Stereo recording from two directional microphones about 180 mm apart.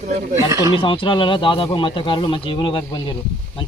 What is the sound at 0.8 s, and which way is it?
Speech, 30° left (ahead or behind).